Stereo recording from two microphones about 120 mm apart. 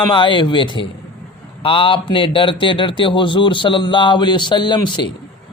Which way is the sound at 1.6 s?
45° left (ahead or behind).